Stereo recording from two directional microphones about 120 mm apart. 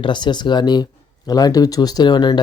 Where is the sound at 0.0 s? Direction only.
40° left (ahead or behind).